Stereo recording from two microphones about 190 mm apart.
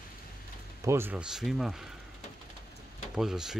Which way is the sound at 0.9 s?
10° right (ahead or behind).